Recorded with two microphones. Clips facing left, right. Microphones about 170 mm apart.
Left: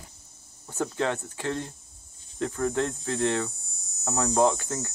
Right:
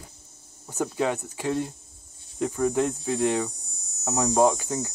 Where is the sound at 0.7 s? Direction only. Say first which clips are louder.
Right 2 dB; 10° right (ahead or behind).